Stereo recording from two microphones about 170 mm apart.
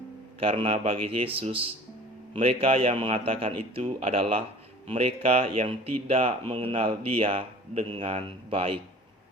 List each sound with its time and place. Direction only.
0.3 s speech: 35° right (ahead or behind)